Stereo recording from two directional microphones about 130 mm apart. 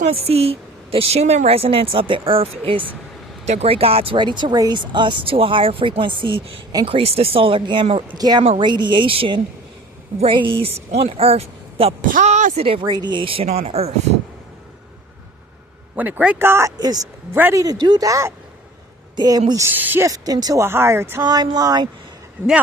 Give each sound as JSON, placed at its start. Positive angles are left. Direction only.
{"t": 0.0, "sound": "a woman's voice", "side_deg": -50}
{"t": 12.0, "sound": "speech", "side_deg": -75}
{"t": 12.6, "sound": "a woman's voice", "side_deg": -45}
{"t": 12.9, "sound": "a woman's voice", "side_deg": -35}
{"t": 16.0, "sound": "a woman's voice", "side_deg": -10}
{"t": 21.2, "sound": "speech", "side_deg": -30}